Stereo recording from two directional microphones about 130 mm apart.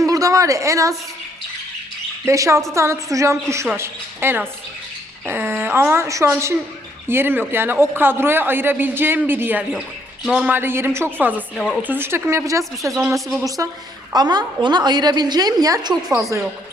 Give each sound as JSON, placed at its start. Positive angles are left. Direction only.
{"t": 0.0, "sound": "a sound", "side_deg": -25}
{"t": 2.2, "sound": "a woman's voice", "side_deg": -25}
{"t": 10.5, "sound": "a man's voice", "side_deg": -15}
{"t": 11.5, "sound": "speech", "side_deg": 0}
{"t": 11.8, "sound": "a woman's voice", "side_deg": -15}
{"t": 13.1, "sound": "speech", "side_deg": 0}
{"t": 13.6, "sound": "a woman's voice", "side_deg": -25}